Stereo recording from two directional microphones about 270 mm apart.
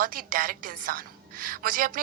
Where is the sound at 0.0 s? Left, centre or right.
Right.